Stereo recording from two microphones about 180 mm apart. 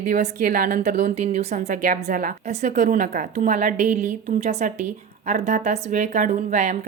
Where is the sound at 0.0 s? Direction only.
45° right (ahead or behind).